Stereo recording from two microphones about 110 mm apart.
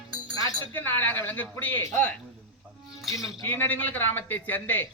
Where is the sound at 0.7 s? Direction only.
20° left (ahead or behind).